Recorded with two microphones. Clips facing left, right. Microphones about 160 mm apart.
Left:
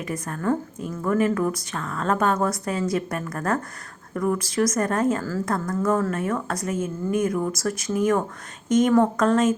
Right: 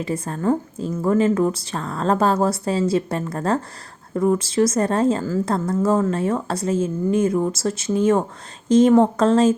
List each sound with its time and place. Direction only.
0.0 s a woman's voice: 30° right (ahead or behind)